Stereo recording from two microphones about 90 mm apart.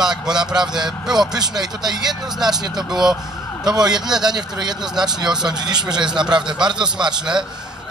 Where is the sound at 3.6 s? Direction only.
50° right (ahead or behind).